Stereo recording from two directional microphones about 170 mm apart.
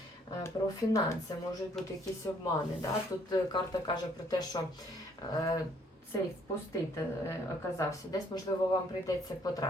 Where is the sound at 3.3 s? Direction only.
25° left (ahead or behind).